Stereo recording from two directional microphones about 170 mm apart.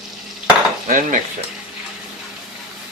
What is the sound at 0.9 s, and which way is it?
Speech, 50° right (ahead or behind).